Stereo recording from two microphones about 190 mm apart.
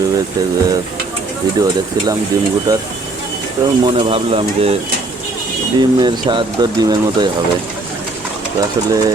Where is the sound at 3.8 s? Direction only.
25° right (ahead or behind).